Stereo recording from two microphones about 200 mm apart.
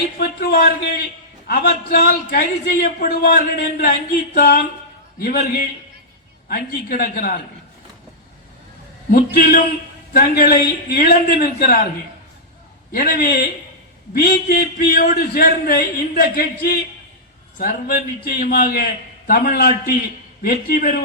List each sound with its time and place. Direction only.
0.2 s speech: 50° left (ahead or behind)
9.0 s speech: 45° left (ahead or behind)
12.9 s speech: 45° left (ahead or behind)